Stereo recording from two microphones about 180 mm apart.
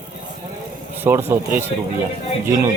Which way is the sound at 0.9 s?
10° right (ahead or behind).